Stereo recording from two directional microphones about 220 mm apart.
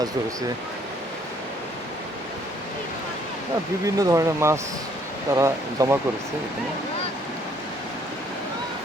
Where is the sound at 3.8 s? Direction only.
15° right (ahead or behind).